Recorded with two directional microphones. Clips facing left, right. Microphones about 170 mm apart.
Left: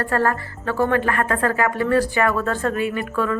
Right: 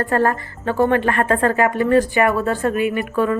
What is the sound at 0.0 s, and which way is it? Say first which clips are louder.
A woman's voice: right 3 dB; 20° right (ahead or behind).